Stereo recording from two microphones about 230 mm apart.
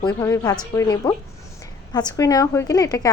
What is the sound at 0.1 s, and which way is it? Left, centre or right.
Speech, centre.